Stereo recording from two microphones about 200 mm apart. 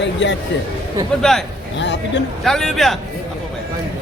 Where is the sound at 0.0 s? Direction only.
65° left (ahead or behind).